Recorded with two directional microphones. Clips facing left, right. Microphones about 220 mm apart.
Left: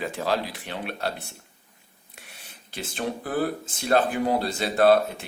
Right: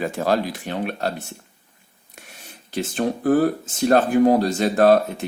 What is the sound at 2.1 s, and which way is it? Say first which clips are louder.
Speech: right 5 dB; 45° right (ahead or behind).